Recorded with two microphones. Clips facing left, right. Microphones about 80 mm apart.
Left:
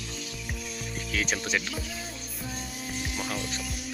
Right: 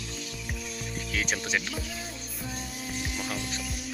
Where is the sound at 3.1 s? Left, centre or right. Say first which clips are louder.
Left 2 dB; centre.